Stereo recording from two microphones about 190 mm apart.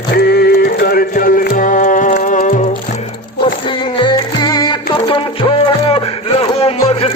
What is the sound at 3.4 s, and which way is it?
Music, 25° left (ahead or behind).